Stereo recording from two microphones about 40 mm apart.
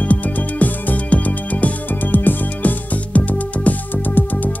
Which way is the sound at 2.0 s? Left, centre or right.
Left.